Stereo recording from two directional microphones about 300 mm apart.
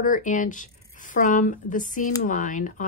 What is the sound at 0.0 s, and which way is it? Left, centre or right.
Speech, left.